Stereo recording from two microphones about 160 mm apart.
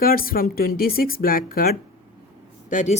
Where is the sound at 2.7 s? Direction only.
50° left (ahead or behind).